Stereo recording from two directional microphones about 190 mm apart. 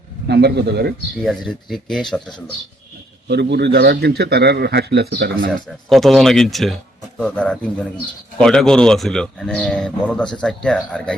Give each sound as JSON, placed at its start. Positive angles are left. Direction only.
{"t": 0.3, "sound": "speech", "side_deg": -60}
{"t": 1.1, "sound": "speech", "side_deg": 0}
{"t": 3.2, "sound": "speech", "side_deg": -60}
{"t": 5.9, "sound": "speech", "side_deg": 0}